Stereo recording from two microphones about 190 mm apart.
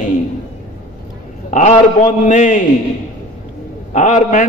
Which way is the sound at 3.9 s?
40° left (ahead or behind).